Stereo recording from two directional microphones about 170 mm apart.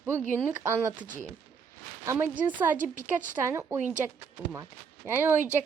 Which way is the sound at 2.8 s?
50° right (ahead or behind).